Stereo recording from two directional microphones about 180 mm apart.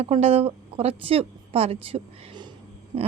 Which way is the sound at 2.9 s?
30° right (ahead or behind).